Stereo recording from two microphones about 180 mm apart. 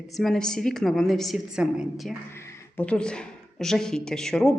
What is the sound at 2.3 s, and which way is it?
Speech, 15° left (ahead or behind).